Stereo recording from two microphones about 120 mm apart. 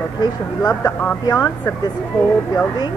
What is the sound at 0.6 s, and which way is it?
Speech, 30° left (ahead or behind).